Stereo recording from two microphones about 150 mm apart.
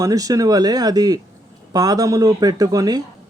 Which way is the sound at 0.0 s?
25° right (ahead or behind).